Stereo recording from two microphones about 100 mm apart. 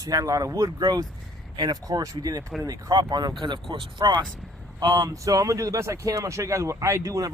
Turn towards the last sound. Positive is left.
turn(degrees=-30)  # may be behind; listen again after turning